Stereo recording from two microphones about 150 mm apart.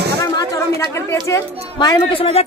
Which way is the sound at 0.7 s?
20° left (ahead or behind).